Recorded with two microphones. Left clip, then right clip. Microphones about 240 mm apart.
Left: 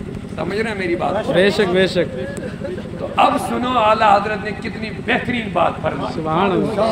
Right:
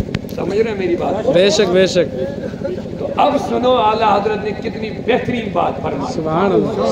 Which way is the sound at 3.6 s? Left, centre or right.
Left.